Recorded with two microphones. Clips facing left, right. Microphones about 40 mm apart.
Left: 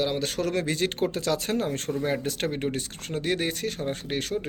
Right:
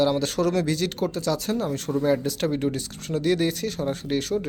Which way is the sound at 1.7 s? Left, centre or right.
Left.